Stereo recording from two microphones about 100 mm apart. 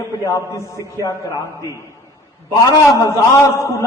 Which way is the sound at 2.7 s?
40° left (ahead or behind).